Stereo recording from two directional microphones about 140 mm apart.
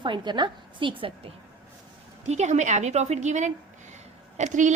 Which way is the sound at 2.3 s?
55° right (ahead or behind).